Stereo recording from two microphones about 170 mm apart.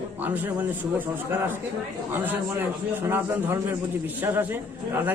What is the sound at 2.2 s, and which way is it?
Speech, 10° right (ahead or behind).